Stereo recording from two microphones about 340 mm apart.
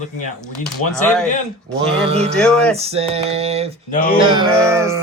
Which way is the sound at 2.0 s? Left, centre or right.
Centre.